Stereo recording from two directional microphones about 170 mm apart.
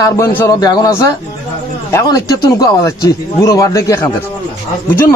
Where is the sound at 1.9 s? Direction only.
20° left (ahead or behind).